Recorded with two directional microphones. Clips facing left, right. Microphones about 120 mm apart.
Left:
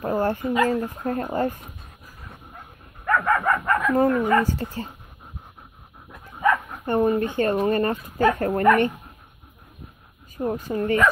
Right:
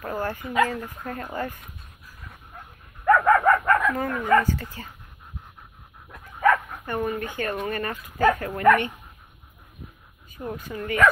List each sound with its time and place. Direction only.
0.0 s speech: 30° left (ahead or behind)
3.1 s dog: 5° right (ahead or behind)
3.3 s dog: 15° left (ahead or behind)
3.9 s speech: 35° left (ahead or behind)
4.2 s speech: 15° left (ahead or behind)
4.6 s speech: 35° left (ahead or behind)
6.3 s dog: 15° left (ahead or behind)
6.9 s speech: 30° left (ahead or behind)
10.3 s speech: 40° left (ahead or behind)